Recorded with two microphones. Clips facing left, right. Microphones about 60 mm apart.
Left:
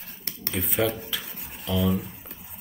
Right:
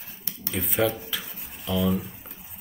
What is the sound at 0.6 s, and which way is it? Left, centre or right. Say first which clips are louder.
Speech: right 1 dB; centre.